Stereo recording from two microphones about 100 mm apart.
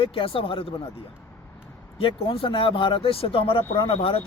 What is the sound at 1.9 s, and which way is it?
Speech, 65° left (ahead or behind).